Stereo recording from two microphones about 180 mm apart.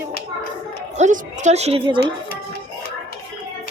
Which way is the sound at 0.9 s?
45° right (ahead or behind).